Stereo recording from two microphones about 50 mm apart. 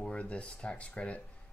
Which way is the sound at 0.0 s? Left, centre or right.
Left.